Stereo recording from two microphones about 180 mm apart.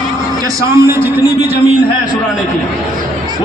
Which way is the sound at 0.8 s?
15° right (ahead or behind).